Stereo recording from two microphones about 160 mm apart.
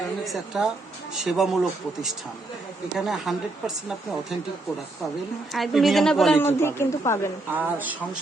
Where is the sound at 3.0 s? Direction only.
Centre (ahead or behind).